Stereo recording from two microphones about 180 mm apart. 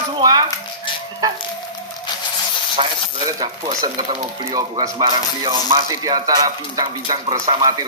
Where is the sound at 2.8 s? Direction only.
25° right (ahead or behind).